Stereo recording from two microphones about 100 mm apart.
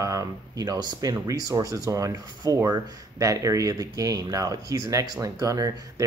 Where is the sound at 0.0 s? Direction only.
35° right (ahead or behind).